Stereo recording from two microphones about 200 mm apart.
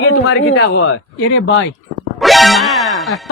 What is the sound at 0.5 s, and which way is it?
Speech, 90° left.